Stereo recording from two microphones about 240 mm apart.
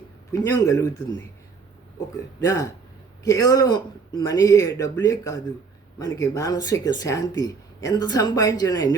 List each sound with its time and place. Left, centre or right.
0.3 s speech: centre
2.4 s speech: centre